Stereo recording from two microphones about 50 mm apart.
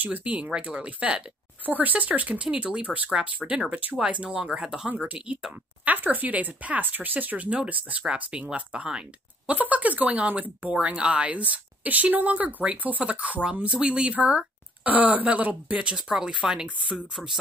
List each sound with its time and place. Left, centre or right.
0.0 s speech: right
4.8 s speech: right
8.1 s speech: centre
17.1 s speech: centre